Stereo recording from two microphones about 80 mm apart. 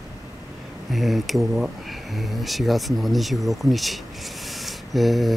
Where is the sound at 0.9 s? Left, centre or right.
Centre.